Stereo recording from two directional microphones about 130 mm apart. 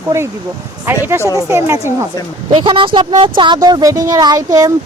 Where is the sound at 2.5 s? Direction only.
40° right (ahead or behind).